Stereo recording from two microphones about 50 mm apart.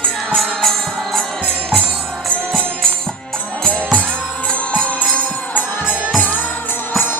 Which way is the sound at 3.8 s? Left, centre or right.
Right.